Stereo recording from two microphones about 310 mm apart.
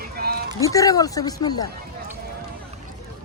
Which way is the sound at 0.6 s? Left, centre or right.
Centre.